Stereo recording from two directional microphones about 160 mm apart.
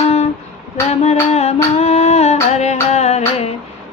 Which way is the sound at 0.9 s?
40° left (ahead or behind).